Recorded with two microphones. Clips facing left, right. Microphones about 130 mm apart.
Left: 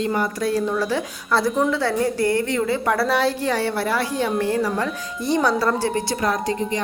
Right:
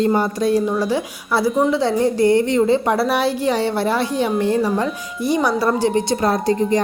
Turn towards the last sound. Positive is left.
turn(degrees=-35)  # may be behind; listen again after turning